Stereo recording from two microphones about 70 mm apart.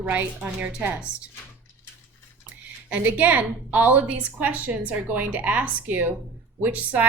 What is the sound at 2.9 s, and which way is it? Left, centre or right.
A woman's voice, right.